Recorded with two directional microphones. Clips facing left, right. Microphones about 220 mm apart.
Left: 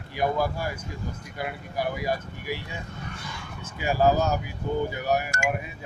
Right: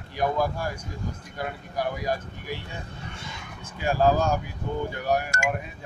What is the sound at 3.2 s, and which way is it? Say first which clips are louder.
Speech: left 1 dB; 20° right (ahead or behind).